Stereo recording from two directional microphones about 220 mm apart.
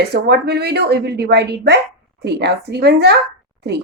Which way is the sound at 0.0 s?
50° right (ahead or behind).